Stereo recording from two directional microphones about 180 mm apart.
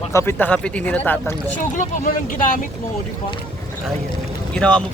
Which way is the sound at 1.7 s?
45° left (ahead or behind).